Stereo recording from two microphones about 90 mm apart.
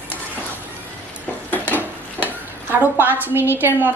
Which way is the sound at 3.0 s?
20° right (ahead or behind).